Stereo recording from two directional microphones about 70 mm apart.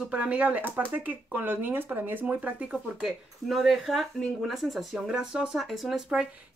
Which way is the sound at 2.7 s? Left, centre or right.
Centre.